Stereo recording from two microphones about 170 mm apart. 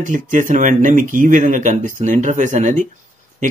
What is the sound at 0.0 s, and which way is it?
Speech, 50° right (ahead or behind).